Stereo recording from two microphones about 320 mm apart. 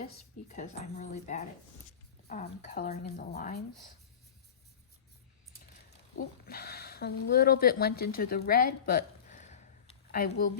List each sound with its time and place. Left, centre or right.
0.0 s speech: left
6.1 s speech: left